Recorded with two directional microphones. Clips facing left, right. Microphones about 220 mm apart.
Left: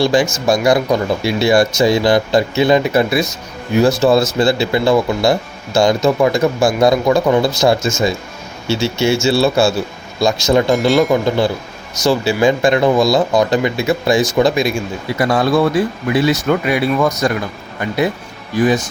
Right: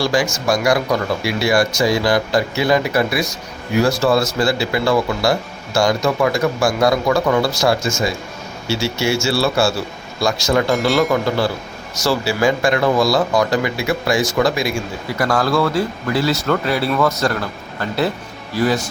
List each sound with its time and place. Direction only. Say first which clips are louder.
0.0 s speech: left 4 dB; 20° left (ahead or behind)